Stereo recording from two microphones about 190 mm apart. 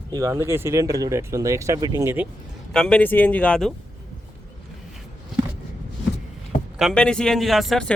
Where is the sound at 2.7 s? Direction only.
5° left (ahead or behind).